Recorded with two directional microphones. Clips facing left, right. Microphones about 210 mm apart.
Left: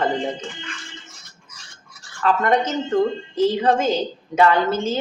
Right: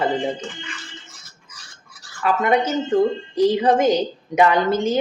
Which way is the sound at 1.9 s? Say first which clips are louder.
Left 1 dB; 10° right (ahead or behind).